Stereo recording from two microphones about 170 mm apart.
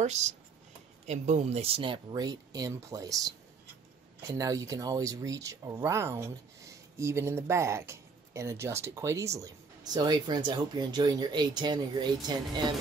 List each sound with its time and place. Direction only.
0.0 s speech: 40° right (ahead or behind); by 12.7 s 25° right (ahead or behind)